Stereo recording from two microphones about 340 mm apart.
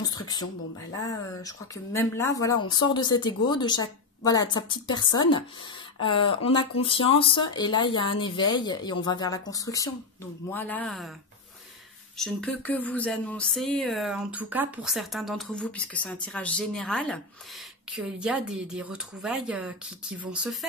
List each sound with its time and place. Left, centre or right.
0.1 s speech: centre
12.2 s speech: centre